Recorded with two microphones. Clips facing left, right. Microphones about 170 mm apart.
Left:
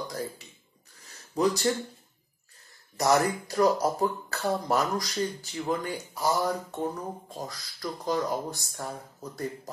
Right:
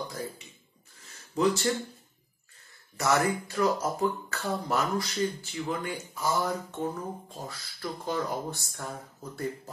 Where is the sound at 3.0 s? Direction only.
35° left (ahead or behind).